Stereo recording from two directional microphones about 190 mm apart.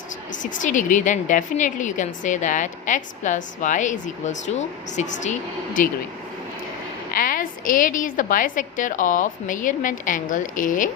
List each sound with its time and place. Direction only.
0.5 s a woman's voice: 40° left (ahead or behind)
7.1 s a woman's voice: 45° left (ahead or behind)